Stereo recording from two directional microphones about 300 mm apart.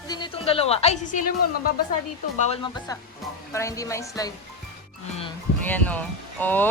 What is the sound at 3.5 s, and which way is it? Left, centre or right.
Speech, centre.